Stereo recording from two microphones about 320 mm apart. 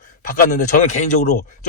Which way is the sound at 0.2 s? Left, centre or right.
Left.